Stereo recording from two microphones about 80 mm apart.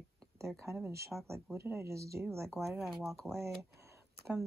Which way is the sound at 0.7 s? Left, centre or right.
Right.